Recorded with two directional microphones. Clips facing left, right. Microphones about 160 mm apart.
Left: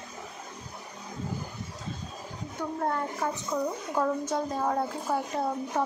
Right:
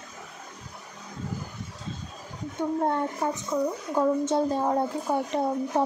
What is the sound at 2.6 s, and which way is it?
A woman's voice, 25° right (ahead or behind).